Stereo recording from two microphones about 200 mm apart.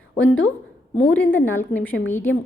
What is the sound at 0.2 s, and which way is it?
Speech, 75° left (ahead or behind).